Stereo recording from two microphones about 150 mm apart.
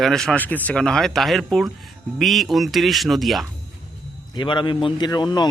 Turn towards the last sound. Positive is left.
turn(degrees=30)  # may be behind; listen again after turning